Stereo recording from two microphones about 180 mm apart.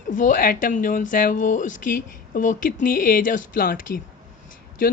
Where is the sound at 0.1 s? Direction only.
45° left (ahead or behind).